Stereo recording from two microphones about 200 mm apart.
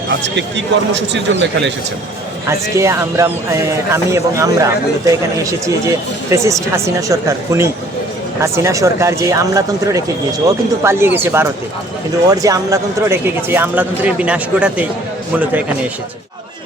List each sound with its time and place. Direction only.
0.3 s speech: 60° right (ahead or behind)
2.5 s speech: 15° right (ahead or behind)